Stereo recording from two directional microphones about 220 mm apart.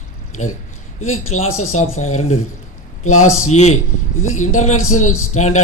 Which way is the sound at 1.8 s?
75° left (ahead or behind).